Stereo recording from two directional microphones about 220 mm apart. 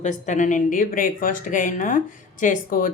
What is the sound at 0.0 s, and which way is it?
Speech, 35° left (ahead or behind).